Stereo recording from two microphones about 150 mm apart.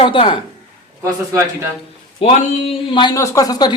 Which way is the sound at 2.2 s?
35° left (ahead or behind).